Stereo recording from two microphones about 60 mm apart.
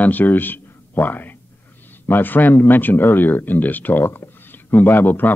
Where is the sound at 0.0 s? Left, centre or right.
Left.